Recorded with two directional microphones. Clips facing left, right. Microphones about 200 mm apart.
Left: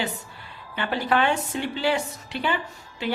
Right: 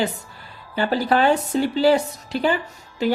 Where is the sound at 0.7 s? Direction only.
35° right (ahead or behind).